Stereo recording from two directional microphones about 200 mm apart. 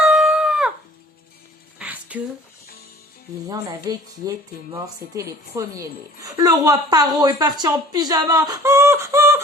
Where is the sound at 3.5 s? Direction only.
20° right (ahead or behind).